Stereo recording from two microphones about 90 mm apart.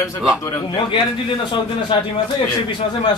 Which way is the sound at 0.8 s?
65° left (ahead or behind).